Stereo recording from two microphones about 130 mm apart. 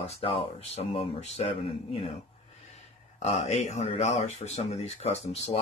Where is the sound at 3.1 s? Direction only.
60° left (ahead or behind).